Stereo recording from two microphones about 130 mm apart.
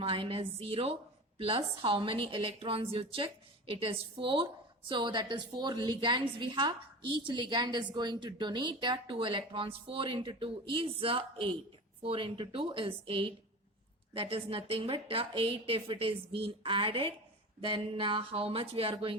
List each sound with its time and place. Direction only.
0.0 s a woman's voice: 45° right (ahead or behind)